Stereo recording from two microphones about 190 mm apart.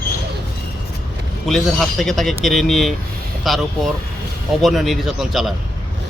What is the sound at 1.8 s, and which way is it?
Speech, centre (ahead or behind).